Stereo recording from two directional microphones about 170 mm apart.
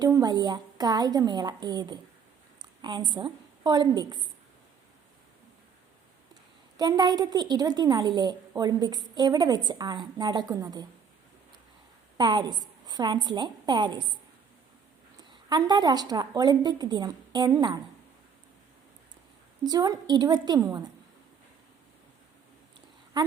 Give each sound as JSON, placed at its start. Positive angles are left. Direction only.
{"t": 0.0, "sound": "a woman's voice", "side_deg": -20}
{"t": 6.7, "sound": "a woman's voice", "side_deg": -25}
{"t": 12.1, "sound": "a woman's voice", "side_deg": -25}
{"t": 15.4, "sound": "a woman's voice", "side_deg": -25}
{"t": 19.6, "sound": "a woman's voice", "side_deg": -20}
{"t": 23.1, "sound": "speech", "side_deg": -25}